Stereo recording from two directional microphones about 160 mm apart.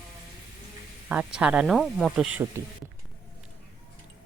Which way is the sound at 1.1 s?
5° right (ahead or behind).